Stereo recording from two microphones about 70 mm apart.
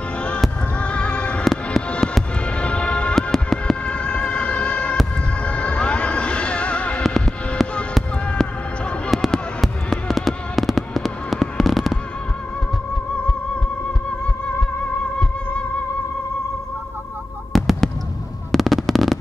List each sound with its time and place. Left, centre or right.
0.7 s music: centre
1.4 s fireworks: centre
2.5 s fireworks: centre
3.8 s music: centre
7.0 s music: centre
9.1 s fireworks: centre
17.5 s fireworks: centre